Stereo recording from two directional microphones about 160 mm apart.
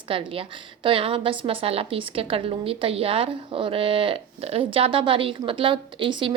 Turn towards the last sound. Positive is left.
turn(degrees=-30)  # may be behind; listen again after turning